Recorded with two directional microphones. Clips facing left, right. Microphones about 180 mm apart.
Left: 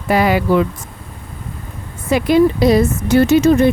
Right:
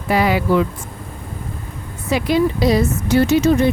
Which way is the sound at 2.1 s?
55° left (ahead or behind).